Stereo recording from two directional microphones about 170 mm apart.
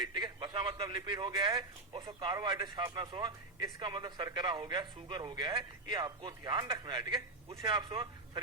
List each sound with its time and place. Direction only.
0.0 s speech: 25° right (ahead or behind)